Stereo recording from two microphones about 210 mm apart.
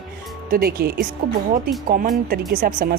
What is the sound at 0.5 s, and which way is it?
Speech, 45° right (ahead or behind).